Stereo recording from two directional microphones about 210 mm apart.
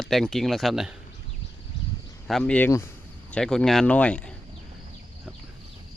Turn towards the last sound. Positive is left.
turn(degrees=5)  # may be behind; listen again after turning